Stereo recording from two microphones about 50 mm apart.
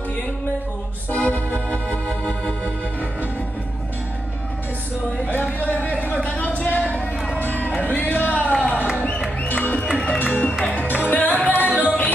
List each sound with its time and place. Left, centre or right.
1.1 s music: left
5.1 s a sound: left
7.3 s music: left
11.0 s music: left